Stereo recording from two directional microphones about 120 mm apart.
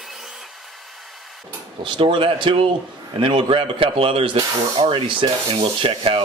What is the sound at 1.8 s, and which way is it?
Speech, 45° right (ahead or behind).